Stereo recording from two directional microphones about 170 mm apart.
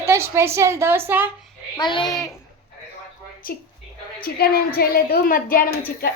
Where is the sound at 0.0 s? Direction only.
15° right (ahead or behind).